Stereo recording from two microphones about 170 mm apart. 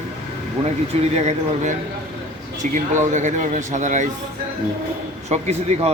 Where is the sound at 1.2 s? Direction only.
45° right (ahead or behind).